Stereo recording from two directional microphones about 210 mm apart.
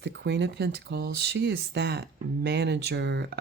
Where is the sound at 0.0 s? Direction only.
55° right (ahead or behind).